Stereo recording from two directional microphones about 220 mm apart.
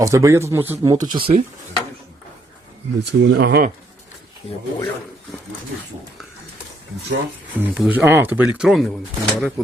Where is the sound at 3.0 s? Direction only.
50° right (ahead or behind).